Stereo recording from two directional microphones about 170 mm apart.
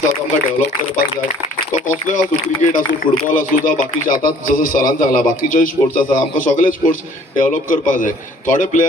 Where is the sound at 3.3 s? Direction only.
55° left (ahead or behind).